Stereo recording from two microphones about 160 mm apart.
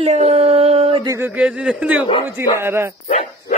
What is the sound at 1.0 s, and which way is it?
Speech, 20° right (ahead or behind).